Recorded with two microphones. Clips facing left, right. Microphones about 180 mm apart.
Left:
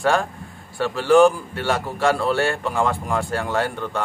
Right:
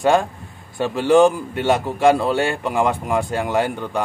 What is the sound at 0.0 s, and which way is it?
A man's voice, 20° right (ahead or behind).